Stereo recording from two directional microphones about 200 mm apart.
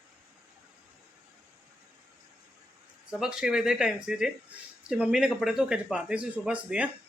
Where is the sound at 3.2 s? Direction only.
5° right (ahead or behind).